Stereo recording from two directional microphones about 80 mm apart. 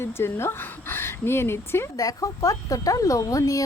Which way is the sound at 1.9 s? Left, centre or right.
Left.